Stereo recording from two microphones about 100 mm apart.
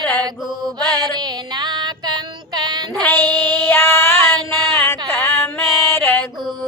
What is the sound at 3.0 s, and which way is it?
Child singing, 20° left (ahead or behind).